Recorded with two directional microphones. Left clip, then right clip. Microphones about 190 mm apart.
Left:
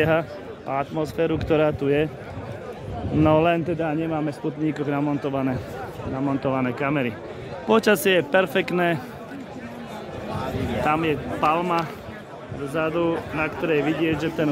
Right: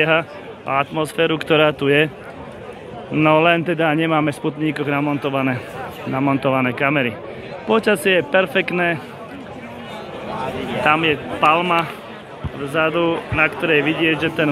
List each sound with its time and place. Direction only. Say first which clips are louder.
0.0 s speech: right 4 dB; 15° left (ahead or behind)
3.2 s speech: right 5 dB; 15° left (ahead or behind); by 4.4 s centre (ahead or behind)
4.6 s speech: right 4 dB; 10° left (ahead or behind)
6.1 s speech: right 7 dB; 5° right (ahead or behind)
7.6 s a man's voice: right 2 dB; 25° left (ahead or behind)
10.3 s a sound: right 4 dB; 65° left (ahead or behind)
10.8 s speech: right 6 dB; 5° left (ahead or behind)